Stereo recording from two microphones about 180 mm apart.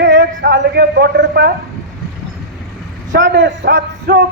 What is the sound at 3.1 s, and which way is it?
A man's voice, 85° right.